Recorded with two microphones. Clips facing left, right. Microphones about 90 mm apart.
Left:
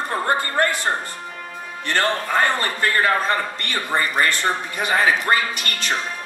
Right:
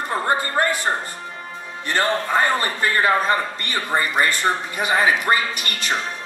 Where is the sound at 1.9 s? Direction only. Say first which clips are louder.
Right 1 dB; 10° right (ahead or behind).